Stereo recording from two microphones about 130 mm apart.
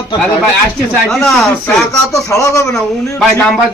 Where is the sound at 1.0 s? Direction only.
Centre (ahead or behind).